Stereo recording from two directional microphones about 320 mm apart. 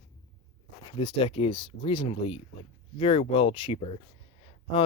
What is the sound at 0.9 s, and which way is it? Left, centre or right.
Speech, centre.